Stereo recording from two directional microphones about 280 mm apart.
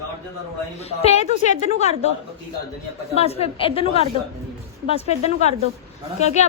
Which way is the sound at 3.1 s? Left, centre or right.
Left.